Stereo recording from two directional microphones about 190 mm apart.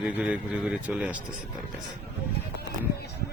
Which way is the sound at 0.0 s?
5° right (ahead or behind).